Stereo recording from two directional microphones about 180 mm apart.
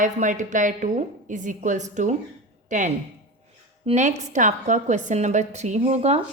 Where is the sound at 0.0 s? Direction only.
45° right (ahead or behind).